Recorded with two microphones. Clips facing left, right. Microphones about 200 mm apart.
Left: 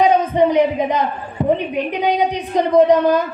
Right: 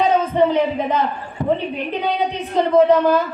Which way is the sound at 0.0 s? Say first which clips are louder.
Left 2 dB; 15° left (ahead or behind).